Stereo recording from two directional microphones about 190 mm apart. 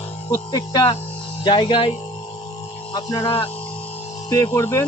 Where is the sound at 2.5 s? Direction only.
30° left (ahead or behind).